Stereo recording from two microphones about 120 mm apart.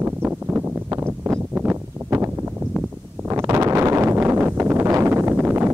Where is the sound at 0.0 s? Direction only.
20° right (ahead or behind).